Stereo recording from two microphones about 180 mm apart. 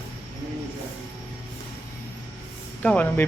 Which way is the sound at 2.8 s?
10° left (ahead or behind).